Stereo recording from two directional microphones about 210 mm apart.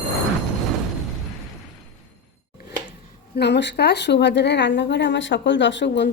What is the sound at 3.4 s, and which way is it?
Speech, 55° left (ahead or behind).